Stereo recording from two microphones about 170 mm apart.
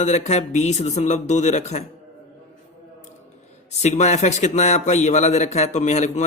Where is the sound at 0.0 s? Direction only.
45° left (ahead or behind).